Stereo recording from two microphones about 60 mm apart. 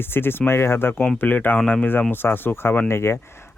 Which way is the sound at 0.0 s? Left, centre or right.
Left.